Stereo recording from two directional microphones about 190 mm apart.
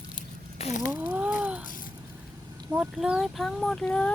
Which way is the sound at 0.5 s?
40° left (ahead or behind).